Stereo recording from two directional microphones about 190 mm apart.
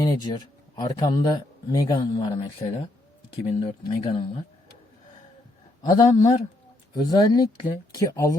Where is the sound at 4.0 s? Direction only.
30° left (ahead or behind).